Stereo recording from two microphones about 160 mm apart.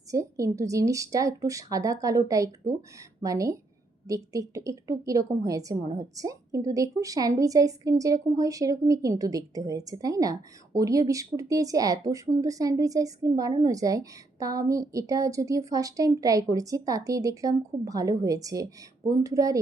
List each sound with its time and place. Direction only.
0.1 s a woman's voice: 20° right (ahead or behind)